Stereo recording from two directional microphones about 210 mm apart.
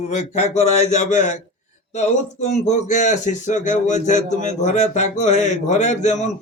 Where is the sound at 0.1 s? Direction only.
35° left (ahead or behind).